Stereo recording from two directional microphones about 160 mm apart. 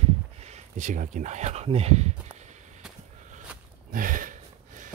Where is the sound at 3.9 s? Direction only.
60° right (ahead or behind).